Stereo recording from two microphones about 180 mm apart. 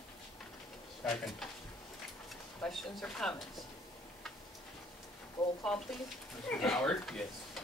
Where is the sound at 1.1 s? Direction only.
Centre (ahead or behind).